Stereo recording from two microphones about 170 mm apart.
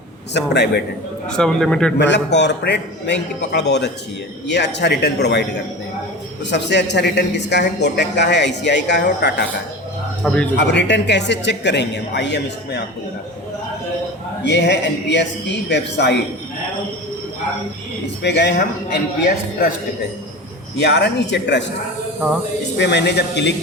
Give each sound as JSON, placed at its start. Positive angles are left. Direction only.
{"t": 0.3, "sound": "a man's voice", "side_deg": 85}
{"t": 1.3, "sound": "a man's voice", "side_deg": 5}
{"t": 2.0, "sound": "a man's voice", "side_deg": 90}
{"t": 10.2, "sound": "a man's voice", "side_deg": 0}
{"t": 10.6, "sound": "speech", "side_deg": 90}
{"t": 14.4, "sound": "speech", "side_deg": 90}
{"t": 18.2, "sound": "speech", "side_deg": 90}
{"t": 20.7, "sound": "a man's voice", "side_deg": 80}
{"t": 22.8, "sound": "speech", "side_deg": 90}